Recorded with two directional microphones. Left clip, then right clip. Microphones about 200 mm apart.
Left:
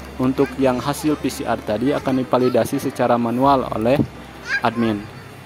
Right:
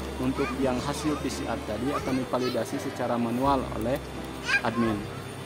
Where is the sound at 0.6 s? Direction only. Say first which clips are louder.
Left 9 dB; 35° left (ahead or behind).